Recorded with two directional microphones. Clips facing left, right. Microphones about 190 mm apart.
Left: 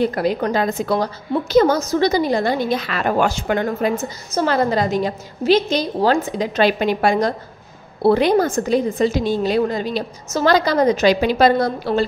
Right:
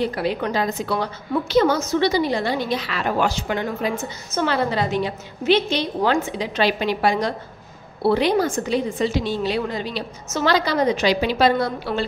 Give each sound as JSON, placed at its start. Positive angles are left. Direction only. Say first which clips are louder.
{"t": 0.0, "sound": "a woman's voice", "louder": "left 4 dB", "side_deg": 45}